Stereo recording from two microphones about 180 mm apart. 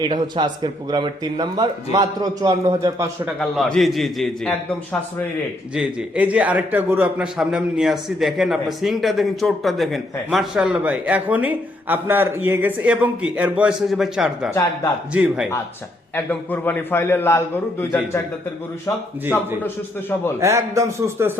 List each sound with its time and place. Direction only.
0.1 s speech: 25° right (ahead or behind)
3.2 s a man's voice: centre (ahead or behind)
16.1 s a man's voice: 10° left (ahead or behind)
20.4 s a man's voice: 15° right (ahead or behind)